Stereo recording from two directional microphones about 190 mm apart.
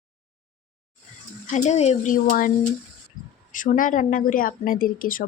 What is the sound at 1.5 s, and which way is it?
Speech, 40° left (ahead or behind).